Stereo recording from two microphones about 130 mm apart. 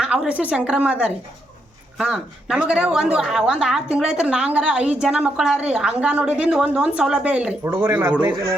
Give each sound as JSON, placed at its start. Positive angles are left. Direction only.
{"t": 0.0, "sound": "a woman's voice", "side_deg": -5}
{"t": 7.6, "sound": "a woman's voice", "side_deg": -20}